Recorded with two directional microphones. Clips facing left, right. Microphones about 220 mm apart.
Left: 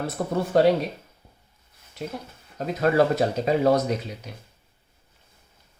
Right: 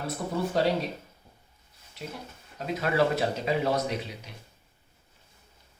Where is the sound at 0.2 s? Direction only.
60° left (ahead or behind).